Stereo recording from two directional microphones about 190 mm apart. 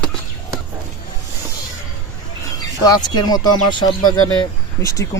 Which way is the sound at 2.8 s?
20° left (ahead or behind).